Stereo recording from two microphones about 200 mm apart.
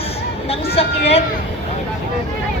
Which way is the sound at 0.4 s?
30° left (ahead or behind).